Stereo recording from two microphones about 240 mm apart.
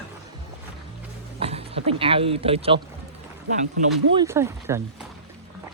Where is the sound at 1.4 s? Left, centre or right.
Right.